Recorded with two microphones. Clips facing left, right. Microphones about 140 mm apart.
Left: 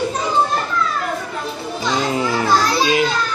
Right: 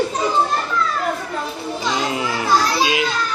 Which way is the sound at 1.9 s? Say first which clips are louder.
Left 4 dB; 35° left (ahead or behind).